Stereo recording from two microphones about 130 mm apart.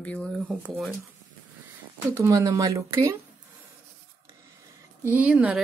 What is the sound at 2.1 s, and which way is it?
Speech, 25° right (ahead or behind).